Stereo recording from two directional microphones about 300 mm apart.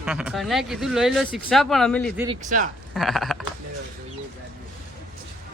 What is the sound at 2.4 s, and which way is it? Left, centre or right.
Speech, right.